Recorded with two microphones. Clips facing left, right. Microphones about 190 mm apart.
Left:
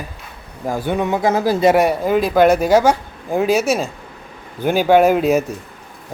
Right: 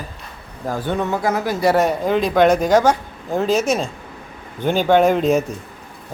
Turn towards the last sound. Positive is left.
turn(degrees=10)  # may be behind; listen again after turning